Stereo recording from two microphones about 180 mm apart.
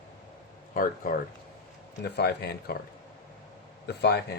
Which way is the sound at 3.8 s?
65° left (ahead or behind).